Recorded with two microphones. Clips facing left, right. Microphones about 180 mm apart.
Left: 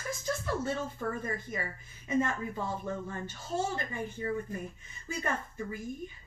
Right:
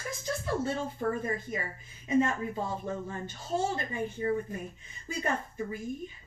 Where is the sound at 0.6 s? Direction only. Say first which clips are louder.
Right 2 dB; 30° right (ahead or behind).